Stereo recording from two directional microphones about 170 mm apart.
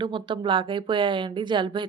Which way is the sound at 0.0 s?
30° right (ahead or behind).